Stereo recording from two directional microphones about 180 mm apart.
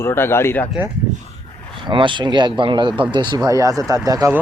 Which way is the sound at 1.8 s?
25° right (ahead or behind).